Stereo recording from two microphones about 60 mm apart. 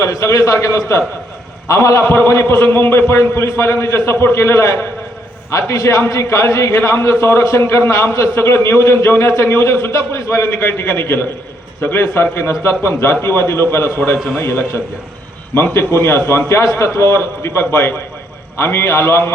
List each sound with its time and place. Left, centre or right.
0.0 s a man's voice: left
2.0 s a man's voice: left
6.4 s a man's voice: left